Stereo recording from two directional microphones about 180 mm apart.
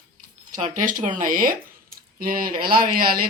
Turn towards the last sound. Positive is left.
turn(degrees=-55)  # may be behind; listen again after turning